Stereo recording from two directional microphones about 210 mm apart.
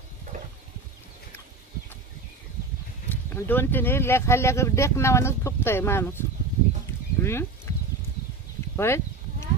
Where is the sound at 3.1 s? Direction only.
10° left (ahead or behind).